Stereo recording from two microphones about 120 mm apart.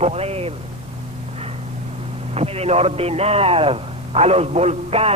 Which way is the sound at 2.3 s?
60° right (ahead or behind).